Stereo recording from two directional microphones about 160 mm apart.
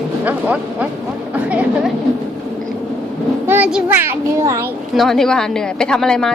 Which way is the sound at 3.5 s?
10° right (ahead or behind).